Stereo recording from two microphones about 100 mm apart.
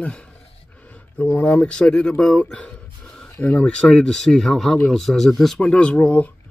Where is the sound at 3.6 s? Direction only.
5° left (ahead or behind).